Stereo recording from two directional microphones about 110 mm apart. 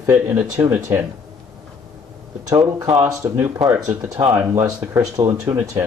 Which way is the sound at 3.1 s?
25° right (ahead or behind).